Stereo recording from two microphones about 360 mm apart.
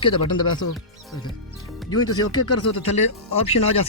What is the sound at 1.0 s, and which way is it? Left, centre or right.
Music, centre.